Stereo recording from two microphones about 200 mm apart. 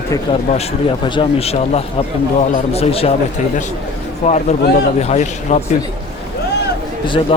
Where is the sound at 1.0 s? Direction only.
25° left (ahead or behind).